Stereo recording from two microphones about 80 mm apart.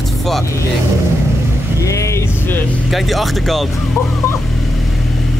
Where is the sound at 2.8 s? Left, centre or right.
Centre.